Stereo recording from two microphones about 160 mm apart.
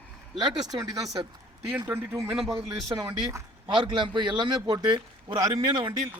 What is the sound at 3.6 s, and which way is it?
A man's voice, 30° right (ahead or behind).